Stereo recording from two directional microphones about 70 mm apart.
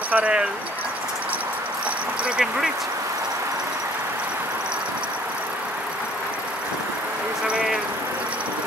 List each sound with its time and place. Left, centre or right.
0.1 s speech: centre
2.2 s speech: centre